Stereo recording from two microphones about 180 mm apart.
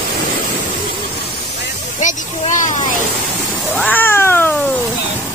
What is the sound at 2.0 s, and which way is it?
Speech, 45° left (ahead or behind).